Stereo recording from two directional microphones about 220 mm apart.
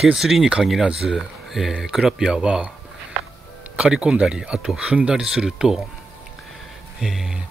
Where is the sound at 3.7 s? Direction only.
5° right (ahead or behind).